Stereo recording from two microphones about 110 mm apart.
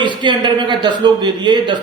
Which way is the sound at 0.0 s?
45° right (ahead or behind).